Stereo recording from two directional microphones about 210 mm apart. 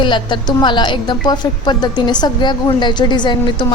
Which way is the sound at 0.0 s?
20° left (ahead or behind).